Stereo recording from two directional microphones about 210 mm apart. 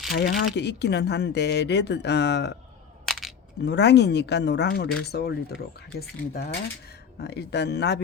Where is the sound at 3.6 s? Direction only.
55° left (ahead or behind).